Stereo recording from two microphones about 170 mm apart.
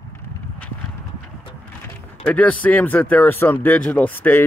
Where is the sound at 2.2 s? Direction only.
10° left (ahead or behind).